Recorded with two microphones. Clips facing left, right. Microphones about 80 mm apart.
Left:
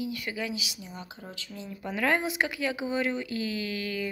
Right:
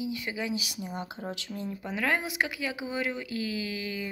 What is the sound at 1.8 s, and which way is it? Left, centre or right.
Speech, centre.